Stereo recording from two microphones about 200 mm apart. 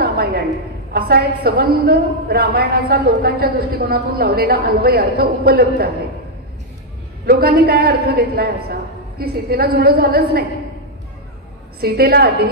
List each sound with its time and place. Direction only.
0.0 s a sound: 55° right (ahead or behind)
0.9 s a woman's voice: 50° right (ahead or behind)
7.2 s a woman's voice: 50° right (ahead or behind)
11.8 s a woman's voice: 50° right (ahead or behind)